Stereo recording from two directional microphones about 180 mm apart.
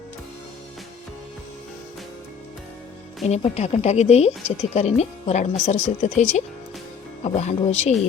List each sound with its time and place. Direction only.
3.2 s speech: 35° left (ahead or behind)